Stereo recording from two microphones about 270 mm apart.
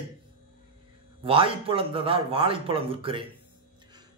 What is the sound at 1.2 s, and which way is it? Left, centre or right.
A man's voice, centre.